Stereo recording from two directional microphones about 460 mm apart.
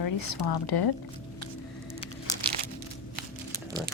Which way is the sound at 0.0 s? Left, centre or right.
Left.